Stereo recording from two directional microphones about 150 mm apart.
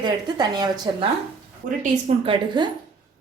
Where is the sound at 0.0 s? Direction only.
30° right (ahead or behind).